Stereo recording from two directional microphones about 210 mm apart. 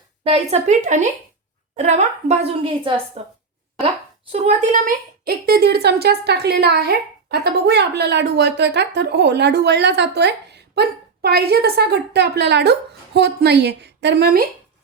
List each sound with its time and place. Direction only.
0.3 s a woman's voice: 35° right (ahead or behind)
4.3 s a woman's voice: 30° right (ahead or behind); by 14.4 s 50° right (ahead or behind)